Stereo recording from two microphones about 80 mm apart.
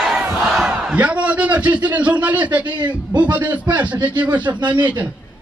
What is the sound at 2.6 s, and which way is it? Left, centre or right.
Speech, right.